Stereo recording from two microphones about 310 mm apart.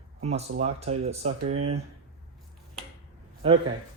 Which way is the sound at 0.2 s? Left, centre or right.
Right.